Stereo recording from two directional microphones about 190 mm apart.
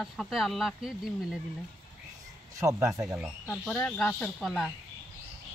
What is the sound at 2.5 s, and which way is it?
Speech, 15° right (ahead or behind).